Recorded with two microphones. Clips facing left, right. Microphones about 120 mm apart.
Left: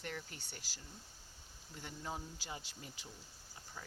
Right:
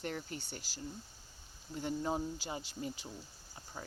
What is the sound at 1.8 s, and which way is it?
Speech, 30° right (ahead or behind).